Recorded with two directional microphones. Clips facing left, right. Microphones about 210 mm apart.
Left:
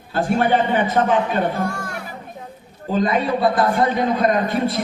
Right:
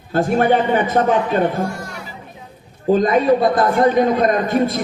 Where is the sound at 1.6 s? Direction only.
55° left (ahead or behind).